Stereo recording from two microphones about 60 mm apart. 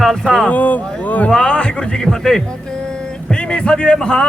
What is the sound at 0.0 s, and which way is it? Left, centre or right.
Speech, centre.